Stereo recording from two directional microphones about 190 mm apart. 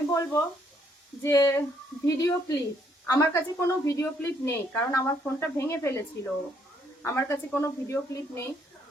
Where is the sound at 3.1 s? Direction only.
15° left (ahead or behind).